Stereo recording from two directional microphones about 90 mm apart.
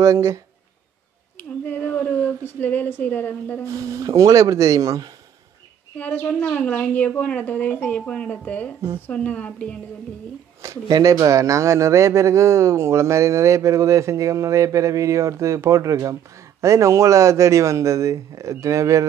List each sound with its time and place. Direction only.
0.0 s speech: 35° right (ahead or behind)
1.3 s speech: 20° left (ahead or behind)
3.6 s speech: 35° right (ahead or behind)
5.9 s speech: 20° left (ahead or behind)
10.6 s speech: 40° right (ahead or behind)